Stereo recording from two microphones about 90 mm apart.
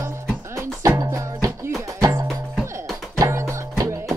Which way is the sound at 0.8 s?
40° right (ahead or behind).